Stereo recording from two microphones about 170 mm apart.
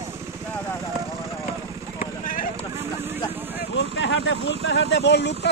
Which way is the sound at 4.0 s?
90° left.